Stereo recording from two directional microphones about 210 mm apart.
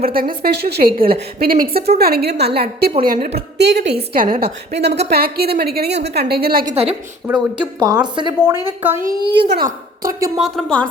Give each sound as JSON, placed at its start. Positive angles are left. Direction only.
{"t": 0.0, "sound": "a woman's voice", "side_deg": -45}
{"t": 7.3, "sound": "speech", "side_deg": -20}
{"t": 8.8, "sound": "a woman's voice", "side_deg": -10}
{"t": 9.2, "sound": "a woman's voice", "side_deg": -50}
{"t": 10.4, "sound": "a woman's voice", "side_deg": 5}